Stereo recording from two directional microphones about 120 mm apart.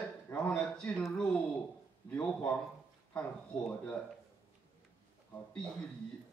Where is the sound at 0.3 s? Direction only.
10° left (ahead or behind).